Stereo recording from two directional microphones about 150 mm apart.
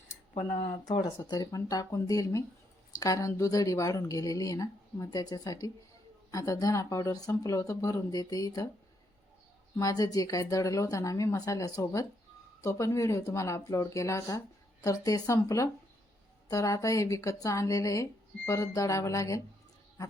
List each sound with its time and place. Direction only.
1.0 s speech: 20° left (ahead or behind)
9.7 s speech: 25° left (ahead or behind)